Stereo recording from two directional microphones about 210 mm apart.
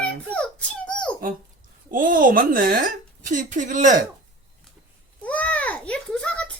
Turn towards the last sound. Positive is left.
turn(degrees=5)  # may be behind; listen again after turning